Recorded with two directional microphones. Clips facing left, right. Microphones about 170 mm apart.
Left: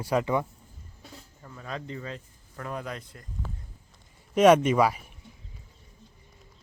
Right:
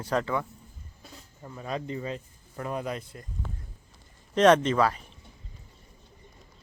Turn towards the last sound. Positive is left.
turn(degrees=10)  # may be behind; listen again after turning